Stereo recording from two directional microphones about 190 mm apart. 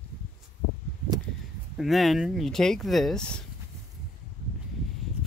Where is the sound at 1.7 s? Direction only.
Centre (ahead or behind).